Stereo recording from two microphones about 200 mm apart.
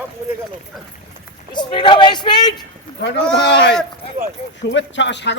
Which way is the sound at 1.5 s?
25° left (ahead or behind).